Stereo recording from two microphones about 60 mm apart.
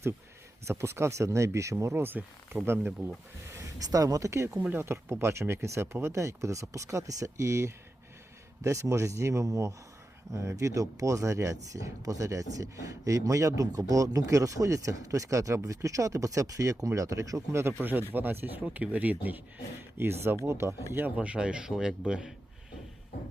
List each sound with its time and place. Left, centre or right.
0.7 s speech: right
2.0 s speech: right
3.8 s speech: right
4.7 s speech: right
17.5 s speech: right
18.1 s speech: right
18.6 s speech: right
20.0 s speech: right
21.2 s speech: centre